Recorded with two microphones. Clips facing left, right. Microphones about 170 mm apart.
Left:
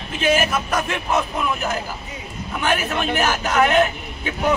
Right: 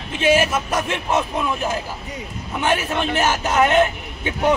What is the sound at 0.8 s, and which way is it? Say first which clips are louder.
Speech: right 1 dB; 25° right (ahead or behind).